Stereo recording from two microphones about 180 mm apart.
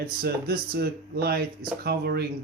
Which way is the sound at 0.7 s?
60° right (ahead or behind).